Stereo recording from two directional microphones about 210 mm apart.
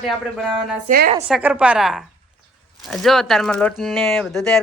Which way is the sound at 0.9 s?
35° right (ahead or behind).